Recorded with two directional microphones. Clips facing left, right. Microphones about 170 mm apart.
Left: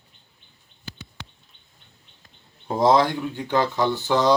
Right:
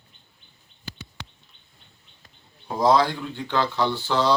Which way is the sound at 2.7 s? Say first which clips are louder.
Left 1 dB; 25° left (ahead or behind).